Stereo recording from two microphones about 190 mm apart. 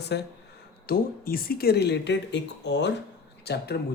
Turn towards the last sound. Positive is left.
turn(degrees=60)  # may be behind; listen again after turning